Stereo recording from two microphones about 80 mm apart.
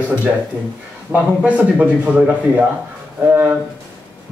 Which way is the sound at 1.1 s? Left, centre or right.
Right.